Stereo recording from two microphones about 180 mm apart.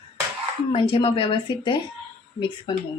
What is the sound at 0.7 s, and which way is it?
Speech, 30° left (ahead or behind).